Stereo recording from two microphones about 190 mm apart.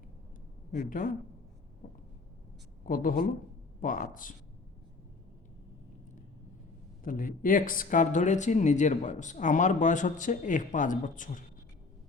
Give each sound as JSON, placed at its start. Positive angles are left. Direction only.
{"t": 0.9, "sound": "speech", "side_deg": 45}
{"t": 1.8, "sound": "a sound", "side_deg": 40}
{"t": 2.8, "sound": "speech", "side_deg": 45}
{"t": 7.0, "sound": "speech", "side_deg": 45}